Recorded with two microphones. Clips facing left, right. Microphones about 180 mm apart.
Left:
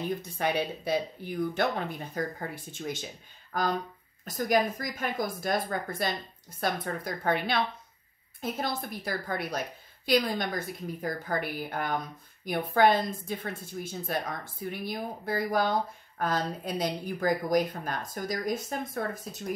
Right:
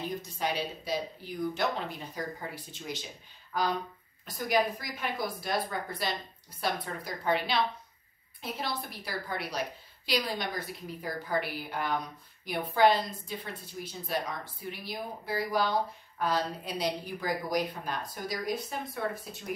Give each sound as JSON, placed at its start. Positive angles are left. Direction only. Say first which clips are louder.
{"t": 0.2, "sound": "a woman's voice", "louder": "left 4 dB", "side_deg": 55}